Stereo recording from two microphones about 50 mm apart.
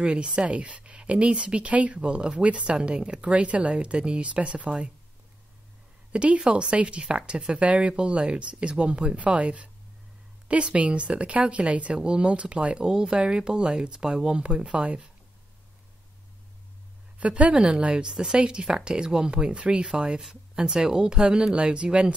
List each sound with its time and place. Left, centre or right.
0.0 s a woman's voice: right
6.1 s a woman's voice: right
17.2 s a woman's voice: right
18.0 s speech: centre